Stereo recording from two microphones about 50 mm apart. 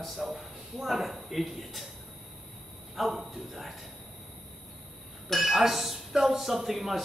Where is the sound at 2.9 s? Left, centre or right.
Centre.